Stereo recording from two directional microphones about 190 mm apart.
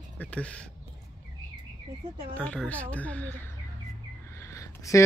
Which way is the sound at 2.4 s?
5° left (ahead or behind).